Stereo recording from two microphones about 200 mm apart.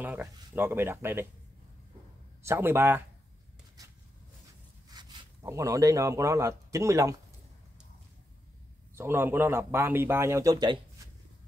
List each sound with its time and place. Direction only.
0.0 s speech: 10° right (ahead or behind)
2.4 s speech: 10° right (ahead or behind)
4.8 s speech: 15° right (ahead or behind)
8.9 s speech: 10° right (ahead or behind)